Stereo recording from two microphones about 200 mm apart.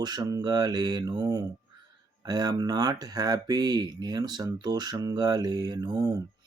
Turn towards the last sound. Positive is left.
turn(degrees=-20)  # may be behind; listen again after turning